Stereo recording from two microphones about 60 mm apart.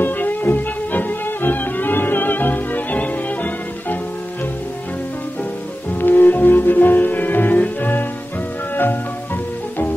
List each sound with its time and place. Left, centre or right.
0.0 s music: left
5.9 s music: left